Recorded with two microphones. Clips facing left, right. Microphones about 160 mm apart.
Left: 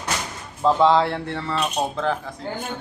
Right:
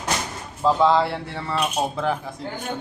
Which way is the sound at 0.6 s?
Centre (ahead or behind).